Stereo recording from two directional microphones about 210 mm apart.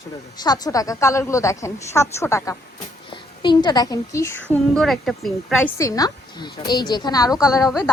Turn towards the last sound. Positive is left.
turn(degrees=15)  # may be behind; listen again after turning